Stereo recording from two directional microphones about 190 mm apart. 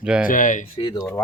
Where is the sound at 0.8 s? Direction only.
25° left (ahead or behind).